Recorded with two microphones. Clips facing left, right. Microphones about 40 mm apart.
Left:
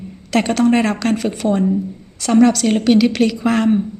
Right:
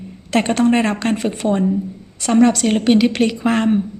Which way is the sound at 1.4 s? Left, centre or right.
Centre.